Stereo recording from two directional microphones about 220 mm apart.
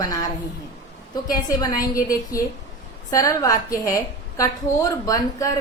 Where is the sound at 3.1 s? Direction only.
15° left (ahead or behind).